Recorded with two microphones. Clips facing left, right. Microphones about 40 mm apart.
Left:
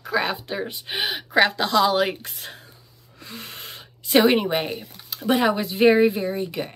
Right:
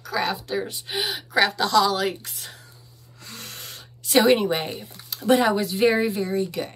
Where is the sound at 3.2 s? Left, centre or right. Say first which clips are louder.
Left 2 dB; centre.